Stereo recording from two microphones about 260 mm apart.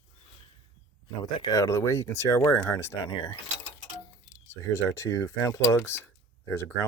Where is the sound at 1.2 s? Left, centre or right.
Centre.